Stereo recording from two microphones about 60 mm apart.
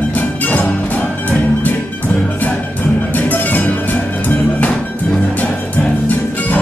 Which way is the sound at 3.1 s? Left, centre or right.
Left.